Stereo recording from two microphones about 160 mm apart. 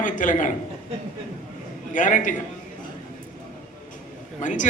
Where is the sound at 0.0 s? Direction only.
55° left (ahead or behind).